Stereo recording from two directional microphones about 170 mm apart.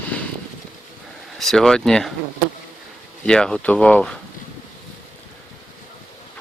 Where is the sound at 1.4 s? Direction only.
Centre (ahead or behind).